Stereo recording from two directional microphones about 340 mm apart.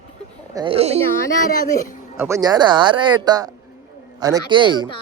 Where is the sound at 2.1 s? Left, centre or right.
Centre.